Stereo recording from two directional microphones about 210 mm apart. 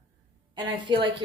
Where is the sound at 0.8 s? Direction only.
25° right (ahead or behind).